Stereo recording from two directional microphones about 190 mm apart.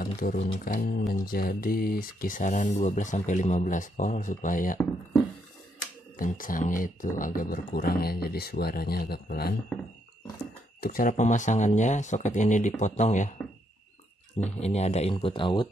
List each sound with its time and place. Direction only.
0.0 s music: 50° left (ahead or behind)
0.4 s speech: 40° left (ahead or behind)
6.1 s speech: 45° left (ahead or behind)
10.8 s speech: 45° left (ahead or behind)
14.6 s speech: 35° left (ahead or behind)